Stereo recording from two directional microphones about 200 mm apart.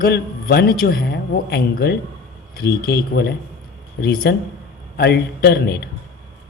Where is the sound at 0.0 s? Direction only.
50° left (ahead or behind).